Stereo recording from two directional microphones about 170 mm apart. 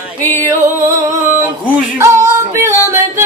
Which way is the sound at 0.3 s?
15° right (ahead or behind).